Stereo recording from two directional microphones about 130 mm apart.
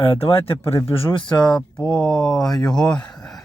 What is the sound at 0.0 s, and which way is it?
Speech, 45° left (ahead or behind).